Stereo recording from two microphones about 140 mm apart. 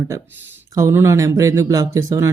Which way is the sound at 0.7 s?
20° right (ahead or behind).